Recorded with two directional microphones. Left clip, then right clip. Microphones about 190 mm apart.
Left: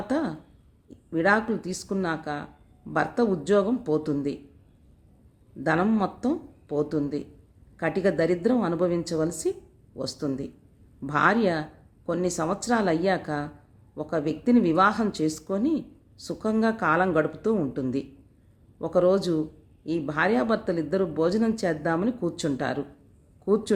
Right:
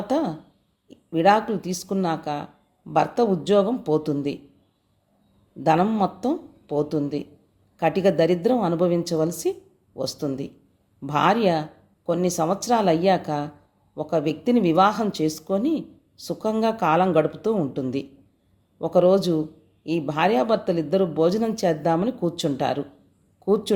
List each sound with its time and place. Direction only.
0.1 s speech: 5° left (ahead or behind)
5.6 s speech: 5° left (ahead or behind)